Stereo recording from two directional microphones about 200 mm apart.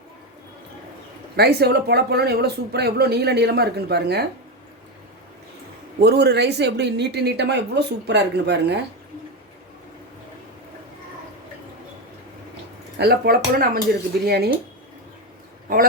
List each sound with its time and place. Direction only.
1.4 s speech: 55° right (ahead or behind)
6.0 s speech: 55° right (ahead or behind)
13.0 s speech: 50° right (ahead or behind)